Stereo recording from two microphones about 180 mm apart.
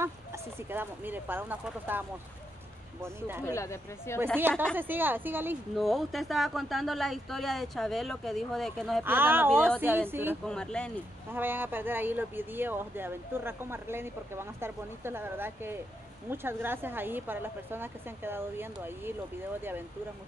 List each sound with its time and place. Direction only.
0.0 s speech: 15° right (ahead or behind)
3.4 s speech: 15° left (ahead or behind)
4.7 s speech: 10° right (ahead or behind)
5.8 s speech: centre (ahead or behind)
9.0 s speech: 10° right (ahead or behind)
10.4 s speech: 5° left (ahead or behind)
11.3 s speech: 10° right (ahead or behind)